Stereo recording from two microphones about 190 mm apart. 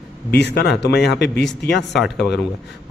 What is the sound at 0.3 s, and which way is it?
A man's voice, 60° left (ahead or behind).